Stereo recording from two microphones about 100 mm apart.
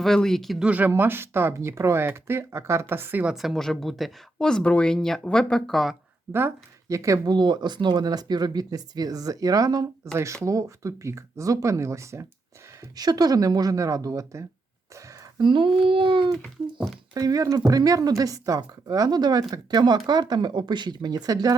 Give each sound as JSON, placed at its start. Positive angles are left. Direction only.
{"t": 0.0, "sound": "speech", "side_deg": 5}
{"t": 0.6, "sound": "speech", "side_deg": -15}
{"t": 3.3, "sound": "speech", "side_deg": 0}
{"t": 6.8, "sound": "speech", "side_deg": -30}
{"t": 7.3, "sound": "speech", "side_deg": -45}
{"t": 13.0, "sound": "speech", "side_deg": -40}
{"t": 15.4, "sound": "a child's voice", "side_deg": -55}
{"t": 17.2, "sound": "speech", "side_deg": -35}